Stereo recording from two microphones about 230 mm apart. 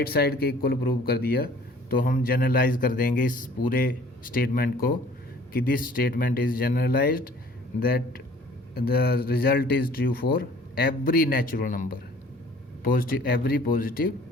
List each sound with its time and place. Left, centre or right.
0.0 s speech: left